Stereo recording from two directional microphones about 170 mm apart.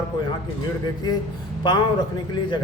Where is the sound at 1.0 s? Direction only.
25° left (ahead or behind).